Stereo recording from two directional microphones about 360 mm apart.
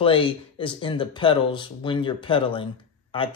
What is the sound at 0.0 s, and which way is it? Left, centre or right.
Speech, centre.